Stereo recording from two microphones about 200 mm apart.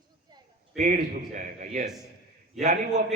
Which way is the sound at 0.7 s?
40° right (ahead or behind).